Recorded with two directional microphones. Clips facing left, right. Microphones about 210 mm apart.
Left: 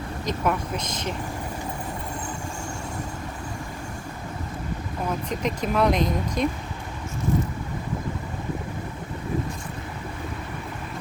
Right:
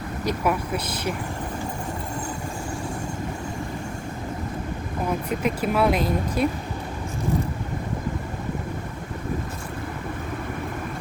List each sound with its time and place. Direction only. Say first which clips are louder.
0.3 s speech: right 2 dB; 10° right (ahead or behind)
5.4 s speech: even; 5° right (ahead or behind)